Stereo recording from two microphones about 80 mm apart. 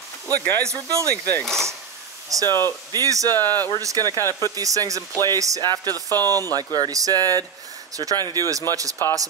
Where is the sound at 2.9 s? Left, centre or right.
Right.